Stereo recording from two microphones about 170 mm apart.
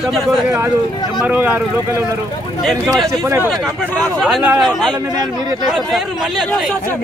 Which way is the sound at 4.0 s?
Centre (ahead or behind).